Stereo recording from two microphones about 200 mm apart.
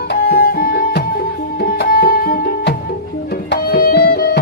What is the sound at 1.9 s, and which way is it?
Music, 45° left (ahead or behind).